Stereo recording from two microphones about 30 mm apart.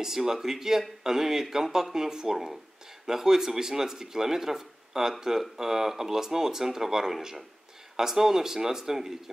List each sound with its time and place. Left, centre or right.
0.0 s speech: centre